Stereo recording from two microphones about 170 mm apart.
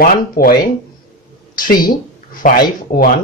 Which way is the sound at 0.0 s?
55° left (ahead or behind).